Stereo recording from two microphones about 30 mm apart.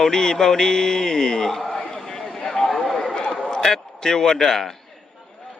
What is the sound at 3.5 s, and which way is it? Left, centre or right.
A man's voice, centre.